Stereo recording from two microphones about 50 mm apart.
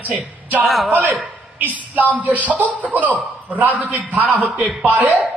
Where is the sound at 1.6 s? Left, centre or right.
Right.